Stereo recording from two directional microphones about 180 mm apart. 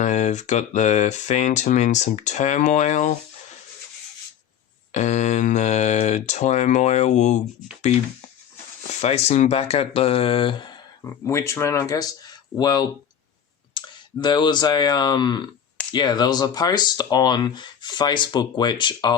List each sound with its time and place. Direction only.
0.0 s speech: 40° left (ahead or behind)
4.9 s speech: 40° left (ahead or behind)
8.9 s speech: 40° left (ahead or behind)